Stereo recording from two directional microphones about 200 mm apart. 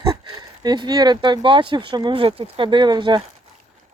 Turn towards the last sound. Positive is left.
turn(degrees=-20)  # may be behind; listen again after turning